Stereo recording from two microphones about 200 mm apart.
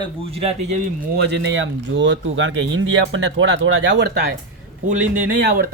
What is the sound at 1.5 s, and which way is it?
Speech, 65° right (ahead or behind).